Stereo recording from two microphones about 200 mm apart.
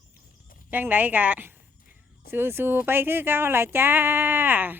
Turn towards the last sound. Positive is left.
turn(degrees=-10)  # may be behind; listen again after turning